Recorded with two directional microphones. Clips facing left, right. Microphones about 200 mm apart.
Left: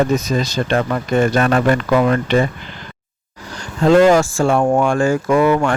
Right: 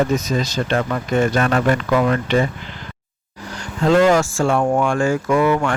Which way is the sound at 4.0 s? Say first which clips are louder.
Left 3 dB; 35° left (ahead or behind).